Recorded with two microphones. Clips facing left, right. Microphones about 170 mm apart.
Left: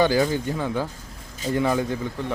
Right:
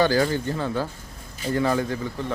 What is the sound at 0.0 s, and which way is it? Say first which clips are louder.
Speech: left 1 dB; 15° left (ahead or behind).